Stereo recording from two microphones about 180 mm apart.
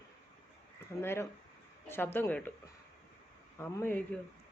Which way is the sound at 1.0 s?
15° left (ahead or behind).